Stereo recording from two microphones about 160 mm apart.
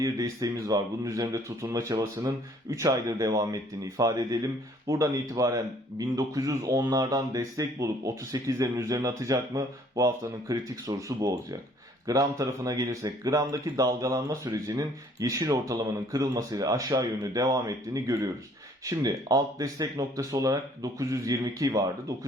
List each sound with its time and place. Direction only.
0.0 s speech: 20° right (ahead or behind)